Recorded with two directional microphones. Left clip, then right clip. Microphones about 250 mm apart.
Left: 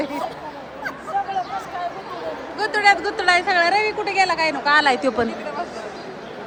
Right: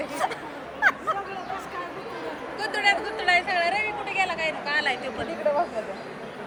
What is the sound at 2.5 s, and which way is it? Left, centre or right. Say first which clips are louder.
Speech: left 7 dB; centre.